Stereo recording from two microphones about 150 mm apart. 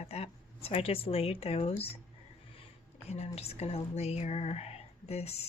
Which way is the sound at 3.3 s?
45° left (ahead or behind).